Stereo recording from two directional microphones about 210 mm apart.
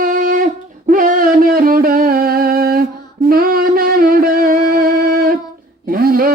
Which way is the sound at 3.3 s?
45° right (ahead or behind).